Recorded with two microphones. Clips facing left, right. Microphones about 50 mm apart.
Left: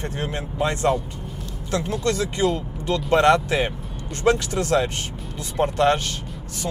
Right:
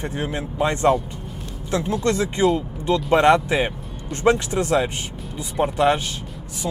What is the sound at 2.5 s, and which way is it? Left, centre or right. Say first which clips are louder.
Vehicle: right 3 dB; right.